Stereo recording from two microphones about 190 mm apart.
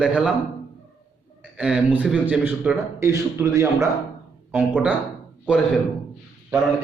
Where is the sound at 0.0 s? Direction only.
5° right (ahead or behind).